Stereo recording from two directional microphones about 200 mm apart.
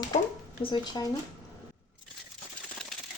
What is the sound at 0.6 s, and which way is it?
Speech, 20° left (ahead or behind).